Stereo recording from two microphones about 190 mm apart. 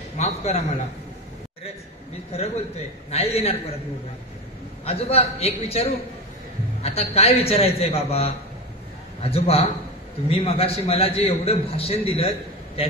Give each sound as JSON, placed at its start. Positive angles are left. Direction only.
{"t": 0.2, "sound": "a man's voice", "side_deg": 35}
{"t": 2.3, "sound": "a man's voice", "side_deg": 35}
{"t": 4.8, "sound": "a man's voice", "side_deg": 35}